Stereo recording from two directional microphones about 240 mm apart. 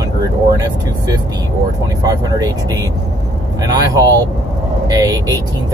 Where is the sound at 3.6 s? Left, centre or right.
Centre.